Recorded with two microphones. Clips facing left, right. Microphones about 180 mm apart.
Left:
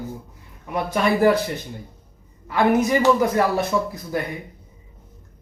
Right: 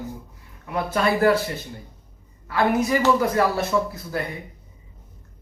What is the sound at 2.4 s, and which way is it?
Speech, 20° left (ahead or behind).